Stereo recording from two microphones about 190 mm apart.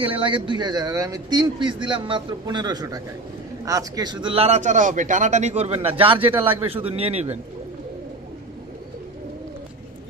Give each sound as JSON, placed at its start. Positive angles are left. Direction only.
{"t": 0.0, "sound": "a man's voice", "side_deg": -25}